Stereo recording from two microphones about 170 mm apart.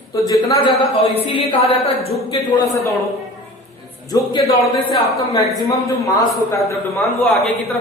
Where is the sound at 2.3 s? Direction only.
20° left (ahead or behind).